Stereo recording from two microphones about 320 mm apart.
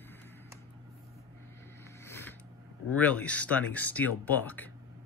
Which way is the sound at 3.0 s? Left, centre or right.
Centre.